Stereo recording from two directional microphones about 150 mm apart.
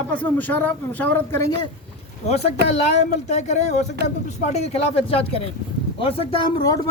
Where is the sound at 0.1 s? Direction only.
10° left (ahead or behind).